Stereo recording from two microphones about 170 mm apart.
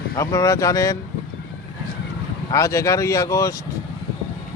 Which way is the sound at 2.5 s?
20° left (ahead or behind).